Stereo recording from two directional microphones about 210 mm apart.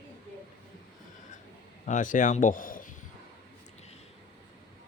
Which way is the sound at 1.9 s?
35° left (ahead or behind).